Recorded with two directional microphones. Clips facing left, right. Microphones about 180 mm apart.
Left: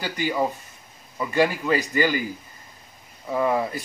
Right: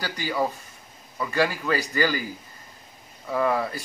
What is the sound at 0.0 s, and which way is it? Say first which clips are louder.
A man's voice: left 2 dB; 15° left (ahead or behind).